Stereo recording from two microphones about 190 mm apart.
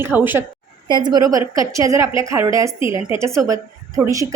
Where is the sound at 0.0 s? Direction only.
10° right (ahead or behind).